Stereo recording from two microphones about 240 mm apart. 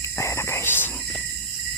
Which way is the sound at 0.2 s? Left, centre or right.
Centre.